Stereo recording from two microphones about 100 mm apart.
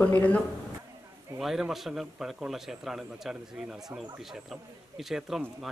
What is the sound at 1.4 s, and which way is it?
Speech, 5° right (ahead or behind).